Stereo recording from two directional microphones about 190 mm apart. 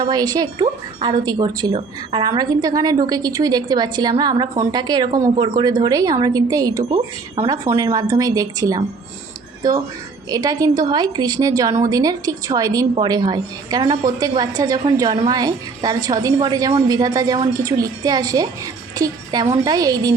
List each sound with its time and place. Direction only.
0.0 s speech: 20° right (ahead or behind)
10.2 s speech: 20° right (ahead or behind)